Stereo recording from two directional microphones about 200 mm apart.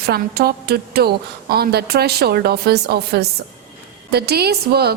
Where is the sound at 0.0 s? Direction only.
50° right (ahead or behind).